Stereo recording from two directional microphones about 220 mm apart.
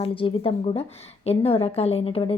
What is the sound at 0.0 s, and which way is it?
A woman's voice, 25° left (ahead or behind).